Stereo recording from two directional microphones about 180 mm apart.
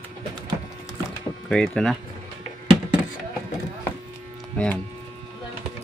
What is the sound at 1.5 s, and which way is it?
Speech, 5° left (ahead or behind).